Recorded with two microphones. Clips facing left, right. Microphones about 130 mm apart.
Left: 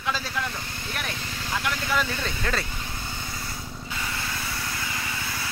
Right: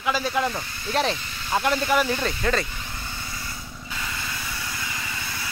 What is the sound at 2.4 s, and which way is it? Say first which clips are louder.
Speech: right 5 dB; 5° right (ahead or behind).